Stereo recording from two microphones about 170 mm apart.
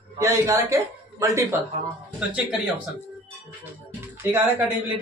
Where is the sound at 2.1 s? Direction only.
5° right (ahead or behind).